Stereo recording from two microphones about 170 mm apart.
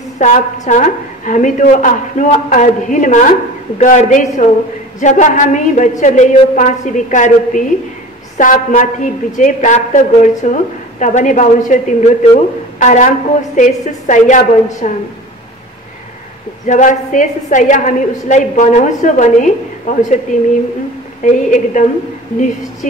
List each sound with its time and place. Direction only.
0.2 s a woman's voice: 45° left (ahead or behind)
16.6 s a woman's voice: 45° left (ahead or behind)
21.2 s a woman's voice: 50° left (ahead or behind)